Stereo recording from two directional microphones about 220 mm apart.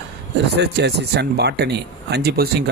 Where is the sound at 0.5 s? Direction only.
50° right (ahead or behind).